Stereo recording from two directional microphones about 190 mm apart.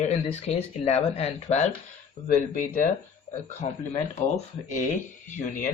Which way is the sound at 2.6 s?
45° left (ahead or behind).